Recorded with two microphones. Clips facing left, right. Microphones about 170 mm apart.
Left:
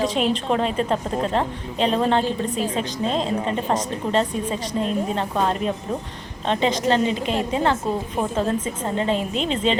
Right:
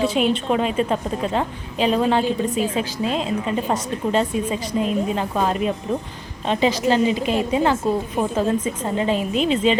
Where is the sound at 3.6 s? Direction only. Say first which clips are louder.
Right 1 dB; 5° right (ahead or behind).